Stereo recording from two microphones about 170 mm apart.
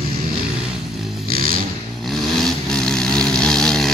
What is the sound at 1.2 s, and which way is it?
Vehicle, 60° right (ahead or behind).